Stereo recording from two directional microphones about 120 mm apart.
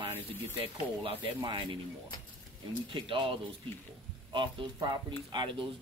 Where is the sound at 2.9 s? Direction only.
45° right (ahead or behind).